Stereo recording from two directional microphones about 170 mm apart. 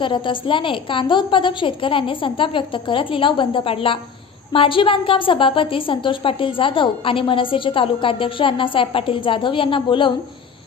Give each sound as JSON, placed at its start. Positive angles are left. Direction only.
{"t": 0.0, "sound": "a woman's voice", "side_deg": 30}